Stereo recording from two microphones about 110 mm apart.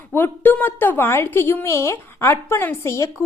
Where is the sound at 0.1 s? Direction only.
20° left (ahead or behind).